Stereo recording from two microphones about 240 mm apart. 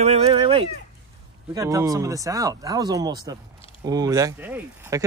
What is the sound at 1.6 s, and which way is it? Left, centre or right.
Speech, centre.